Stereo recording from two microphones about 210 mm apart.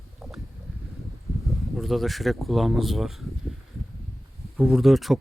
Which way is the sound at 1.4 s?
Centre (ahead or behind).